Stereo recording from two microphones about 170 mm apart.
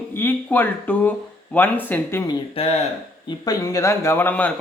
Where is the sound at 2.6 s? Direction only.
35° left (ahead or behind).